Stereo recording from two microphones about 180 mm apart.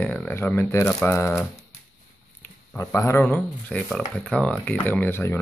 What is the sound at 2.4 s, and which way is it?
Speech, 15° left (ahead or behind).